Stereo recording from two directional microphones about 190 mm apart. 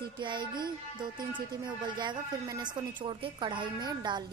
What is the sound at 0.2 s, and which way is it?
Speech, 25° right (ahead or behind).